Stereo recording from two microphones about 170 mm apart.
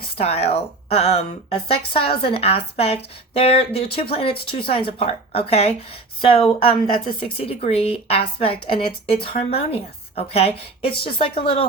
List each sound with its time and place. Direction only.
0.2 s speech: 35° left (ahead or behind)